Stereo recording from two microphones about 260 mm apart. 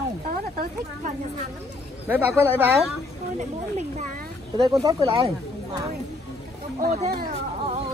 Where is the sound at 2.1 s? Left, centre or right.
Centre.